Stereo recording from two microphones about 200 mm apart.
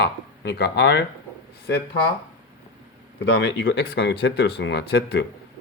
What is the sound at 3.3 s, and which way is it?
Speech, 60° left (ahead or behind).